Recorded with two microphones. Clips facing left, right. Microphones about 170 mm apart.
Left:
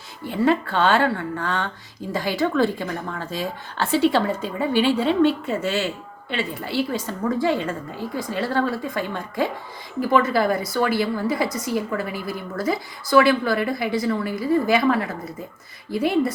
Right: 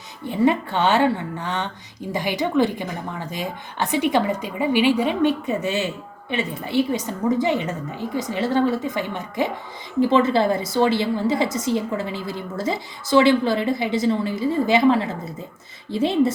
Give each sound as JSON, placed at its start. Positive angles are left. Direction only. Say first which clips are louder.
{"t": 0.3, "sound": "a woman's voice", "louder": "right 1 dB", "side_deg": -20}